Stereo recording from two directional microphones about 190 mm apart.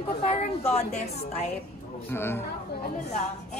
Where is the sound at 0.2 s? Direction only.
35° left (ahead or behind).